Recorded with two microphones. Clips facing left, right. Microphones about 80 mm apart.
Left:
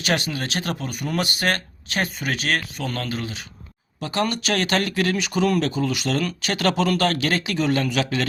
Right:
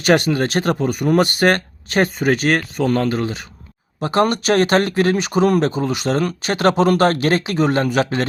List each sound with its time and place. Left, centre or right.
0.0 s speech: right